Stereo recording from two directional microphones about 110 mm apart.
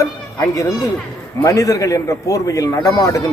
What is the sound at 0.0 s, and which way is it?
A child's voice, 30° left (ahead or behind).